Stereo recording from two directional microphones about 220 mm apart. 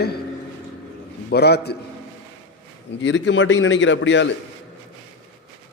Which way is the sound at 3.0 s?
55° left (ahead or behind).